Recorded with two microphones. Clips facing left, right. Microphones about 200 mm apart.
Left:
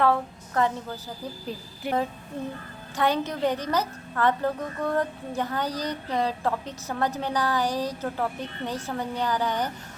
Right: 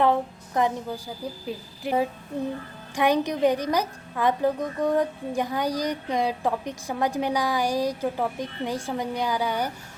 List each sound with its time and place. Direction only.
0.0 s a woman's voice: 15° right (ahead or behind)